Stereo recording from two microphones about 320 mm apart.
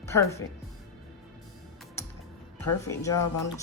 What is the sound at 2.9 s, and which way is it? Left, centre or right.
Speech, centre.